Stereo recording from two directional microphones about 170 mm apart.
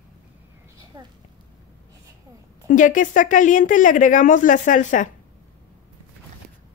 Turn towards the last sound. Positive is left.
turn(degrees=50)  # may be behind; listen again after turning